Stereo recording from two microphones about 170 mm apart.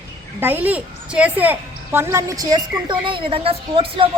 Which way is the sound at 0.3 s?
10° right (ahead or behind).